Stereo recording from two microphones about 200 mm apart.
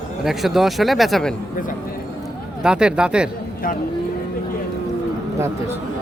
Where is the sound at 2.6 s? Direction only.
5° right (ahead or behind).